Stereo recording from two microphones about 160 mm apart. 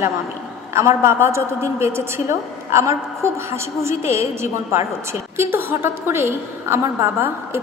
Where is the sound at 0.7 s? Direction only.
15° right (ahead or behind).